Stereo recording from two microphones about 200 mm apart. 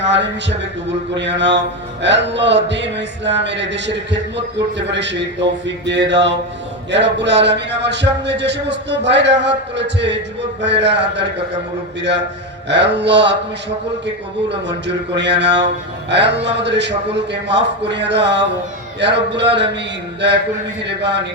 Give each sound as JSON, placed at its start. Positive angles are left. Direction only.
{"t": 0.0, "sound": "music", "side_deg": -60}
{"t": 12.6, "sound": "music", "side_deg": -60}
{"t": 14.5, "sound": "music", "side_deg": -60}
{"t": 20.8, "sound": "music", "side_deg": -60}